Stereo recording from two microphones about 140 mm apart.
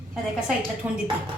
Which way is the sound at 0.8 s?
10° right (ahead or behind).